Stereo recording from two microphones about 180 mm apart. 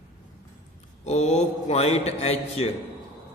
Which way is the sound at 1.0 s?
40° left (ahead or behind).